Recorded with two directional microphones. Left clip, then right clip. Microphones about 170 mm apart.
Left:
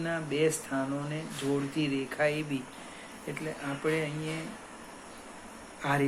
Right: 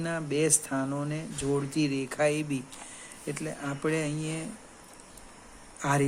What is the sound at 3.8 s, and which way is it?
Speech, 70° right (ahead or behind).